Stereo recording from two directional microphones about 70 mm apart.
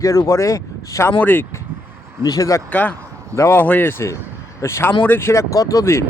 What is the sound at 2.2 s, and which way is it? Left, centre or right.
Speech, left.